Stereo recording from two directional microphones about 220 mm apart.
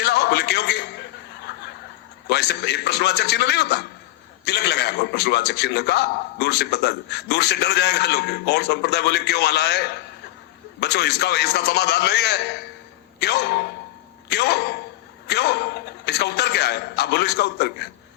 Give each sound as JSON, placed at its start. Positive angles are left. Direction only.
{"t": 0.0, "sound": "music", "side_deg": 50}
{"t": 2.2, "sound": "a man's voice", "side_deg": 50}